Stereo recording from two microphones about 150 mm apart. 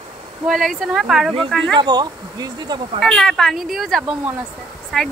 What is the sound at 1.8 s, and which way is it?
Speech, 30° right (ahead or behind).